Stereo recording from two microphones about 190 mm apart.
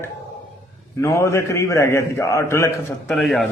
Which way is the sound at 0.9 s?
15° left (ahead or behind).